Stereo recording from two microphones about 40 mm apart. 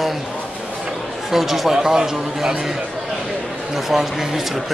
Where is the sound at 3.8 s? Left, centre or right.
Centre.